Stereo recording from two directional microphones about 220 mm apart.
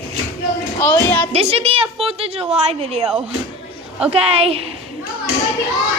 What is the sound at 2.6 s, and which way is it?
Speech, 30° right (ahead or behind).